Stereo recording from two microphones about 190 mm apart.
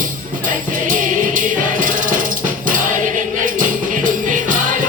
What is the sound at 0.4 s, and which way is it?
Music, 45° right (ahead or behind).